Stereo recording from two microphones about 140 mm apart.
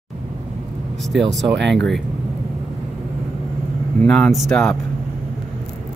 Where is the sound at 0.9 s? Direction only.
Centre (ahead or behind).